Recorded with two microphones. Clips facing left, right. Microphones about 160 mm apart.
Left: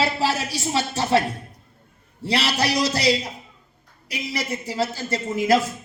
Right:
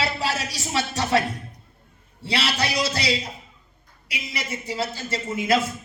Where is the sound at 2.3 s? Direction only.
35° left (ahead or behind).